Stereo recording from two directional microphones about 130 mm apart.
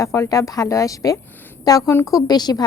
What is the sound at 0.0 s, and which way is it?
A woman's voice, 25° left (ahead or behind).